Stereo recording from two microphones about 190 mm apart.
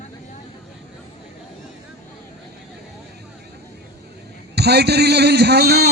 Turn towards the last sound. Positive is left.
turn(degrees=-60)  # may be behind; listen again after turning